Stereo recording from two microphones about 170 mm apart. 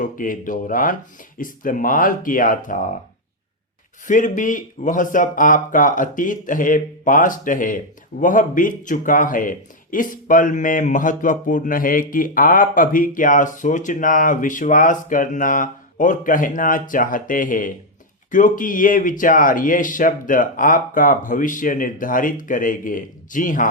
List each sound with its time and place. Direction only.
0.0 s speech: 50° left (ahead or behind)
4.0 s speech: 50° left (ahead or behind)